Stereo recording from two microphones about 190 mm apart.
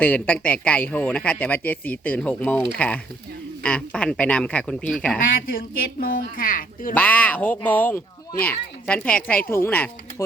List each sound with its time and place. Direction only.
0.0 s a man's voice: 10° left (ahead or behind)
5.5 s a woman's voice: 50° left (ahead or behind)
6.9 s a man's voice: 10° left (ahead or behind)